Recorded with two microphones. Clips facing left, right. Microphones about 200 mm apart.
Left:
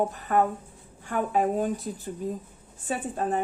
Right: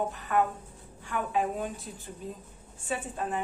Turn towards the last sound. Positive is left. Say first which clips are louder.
# left 5 dB
turn(degrees=40)  # may be behind; listen again after turning